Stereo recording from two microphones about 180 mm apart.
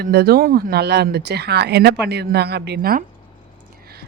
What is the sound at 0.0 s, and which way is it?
Speech, 60° right (ahead or behind).